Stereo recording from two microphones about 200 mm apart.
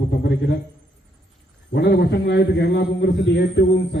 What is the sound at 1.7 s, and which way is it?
A man's voice, 55° left (ahead or behind).